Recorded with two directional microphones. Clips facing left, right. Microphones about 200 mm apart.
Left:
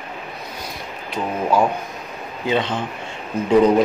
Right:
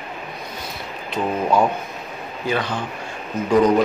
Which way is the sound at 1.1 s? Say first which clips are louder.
Right 1 dB; 10° left (ahead or behind).